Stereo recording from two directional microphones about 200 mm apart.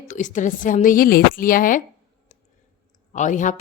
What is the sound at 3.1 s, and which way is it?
Speech, 40° left (ahead or behind).